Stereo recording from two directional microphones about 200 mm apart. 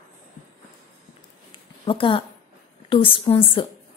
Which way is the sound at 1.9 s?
25° left (ahead or behind).